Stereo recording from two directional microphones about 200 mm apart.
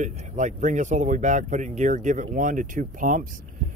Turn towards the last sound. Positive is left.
turn(degrees=-40)  # may be behind; listen again after turning